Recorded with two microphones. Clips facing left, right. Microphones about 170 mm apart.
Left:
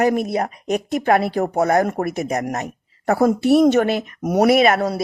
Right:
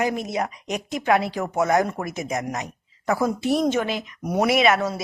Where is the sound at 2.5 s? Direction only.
45° left (ahead or behind).